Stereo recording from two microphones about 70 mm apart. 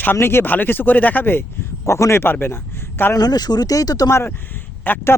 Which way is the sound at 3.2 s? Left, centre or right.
Left.